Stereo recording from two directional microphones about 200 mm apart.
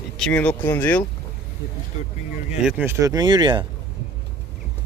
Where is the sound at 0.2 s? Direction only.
5° left (ahead or behind).